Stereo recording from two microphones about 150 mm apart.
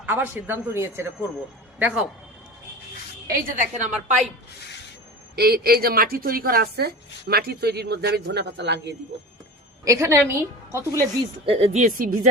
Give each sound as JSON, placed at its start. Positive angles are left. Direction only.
{"t": 0.0, "sound": "speech", "side_deg": -15}
{"t": 3.3, "sound": "a woman's voice", "side_deg": -60}
{"t": 5.4, "sound": "a woman's voice", "side_deg": -90}
{"t": 9.8, "sound": "a woman's voice", "side_deg": -20}
{"t": 11.4, "sound": "speech", "side_deg": -45}